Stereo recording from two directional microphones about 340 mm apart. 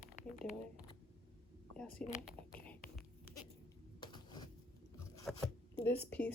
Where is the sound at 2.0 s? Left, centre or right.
Centre.